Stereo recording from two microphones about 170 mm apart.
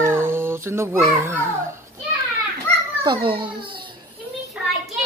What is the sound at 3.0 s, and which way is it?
Speech, 30° right (ahead or behind).